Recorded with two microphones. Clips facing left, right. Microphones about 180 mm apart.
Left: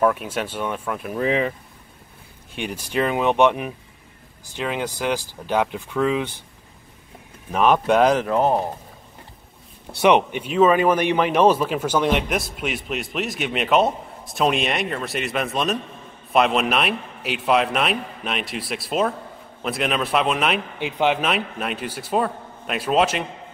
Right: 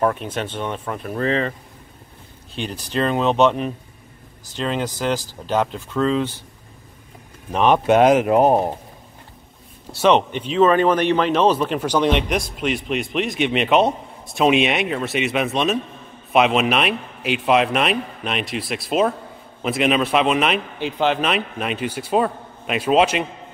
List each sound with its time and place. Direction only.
0.0 s speech: 5° left (ahead or behind)
2.5 s speech: 10° left (ahead or behind)
7.5 s a man's voice: centre (ahead or behind)
8.3 s speech: 15° right (ahead or behind)
9.9 s a man's voice: 10° left (ahead or behind)